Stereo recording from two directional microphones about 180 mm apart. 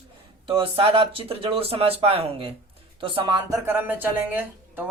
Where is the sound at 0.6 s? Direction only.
30° right (ahead or behind).